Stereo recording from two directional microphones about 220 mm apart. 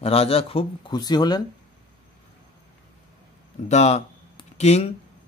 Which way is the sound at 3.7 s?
30° left (ahead or behind).